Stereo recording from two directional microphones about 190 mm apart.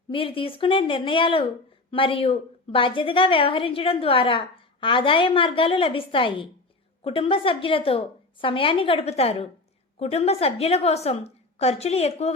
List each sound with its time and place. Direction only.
0.1 s a woman's voice: 30° left (ahead or behind)